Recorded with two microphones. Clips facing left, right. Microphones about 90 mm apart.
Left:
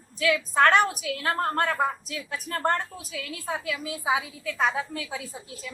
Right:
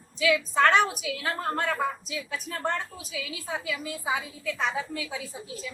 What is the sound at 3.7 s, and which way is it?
Speech, centre (ahead or behind).